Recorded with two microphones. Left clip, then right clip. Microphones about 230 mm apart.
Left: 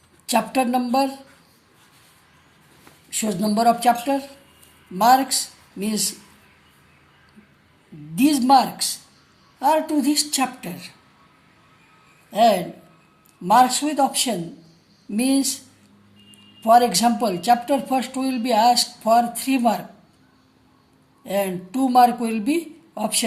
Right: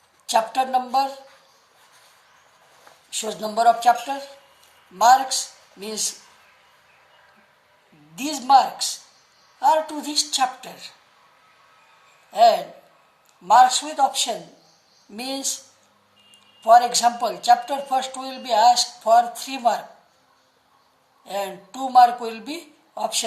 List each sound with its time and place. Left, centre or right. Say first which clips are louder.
0.3 s speech: even; left
3.2 s speech: left 1 dB; left
8.1 s speech: left 1 dB; left
12.3 s speech: right 1 dB; left
16.6 s speech: right 1 dB; left
21.2 s speech: left 4 dB; left